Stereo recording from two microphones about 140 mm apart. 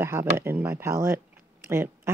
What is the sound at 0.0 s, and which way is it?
Speech, 20° right (ahead or behind).